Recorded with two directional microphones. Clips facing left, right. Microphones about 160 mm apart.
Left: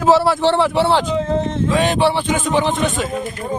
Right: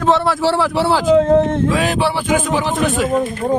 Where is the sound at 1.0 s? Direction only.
60° right (ahead or behind).